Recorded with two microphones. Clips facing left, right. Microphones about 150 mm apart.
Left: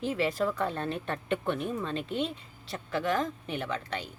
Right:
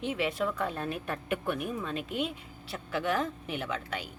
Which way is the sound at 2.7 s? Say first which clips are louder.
Left 1 dB; 5° right (ahead or behind).